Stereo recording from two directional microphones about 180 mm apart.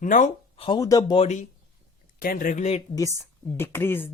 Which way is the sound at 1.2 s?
40° left (ahead or behind).